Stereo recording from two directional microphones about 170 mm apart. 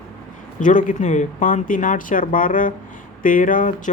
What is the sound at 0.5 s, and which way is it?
Speech, 50° left (ahead or behind).